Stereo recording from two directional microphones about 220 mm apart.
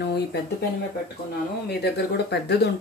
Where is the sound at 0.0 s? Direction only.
50° left (ahead or behind).